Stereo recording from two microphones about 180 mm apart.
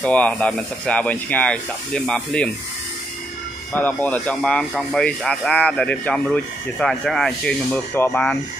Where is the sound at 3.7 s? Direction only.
10° left (ahead or behind).